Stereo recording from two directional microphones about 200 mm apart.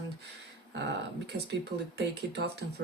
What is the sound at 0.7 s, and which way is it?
Speech, 60° right (ahead or behind).